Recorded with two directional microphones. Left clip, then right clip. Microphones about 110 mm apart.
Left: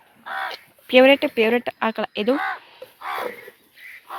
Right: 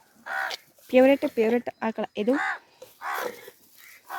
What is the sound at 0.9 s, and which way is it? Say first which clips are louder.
Speech: left 5 dB; 15° right (ahead or behind).